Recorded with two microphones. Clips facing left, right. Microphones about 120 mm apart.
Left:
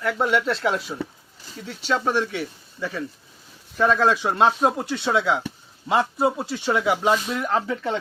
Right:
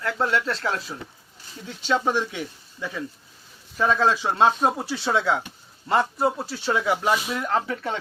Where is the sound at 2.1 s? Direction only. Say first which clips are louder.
Left 1 dB; 10° right (ahead or behind).